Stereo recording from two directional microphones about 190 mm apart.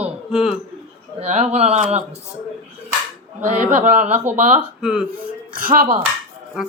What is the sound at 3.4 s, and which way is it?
A man's voice, 40° right (ahead or behind).